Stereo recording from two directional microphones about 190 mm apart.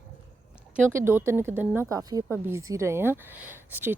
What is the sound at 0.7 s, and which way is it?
A woman's voice, 15° right (ahead or behind).